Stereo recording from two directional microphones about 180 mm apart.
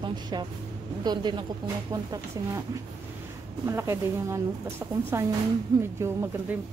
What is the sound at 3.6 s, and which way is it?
Speech, 15° right (ahead or behind).